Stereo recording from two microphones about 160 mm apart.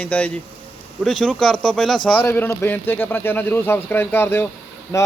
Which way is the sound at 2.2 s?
15° left (ahead or behind).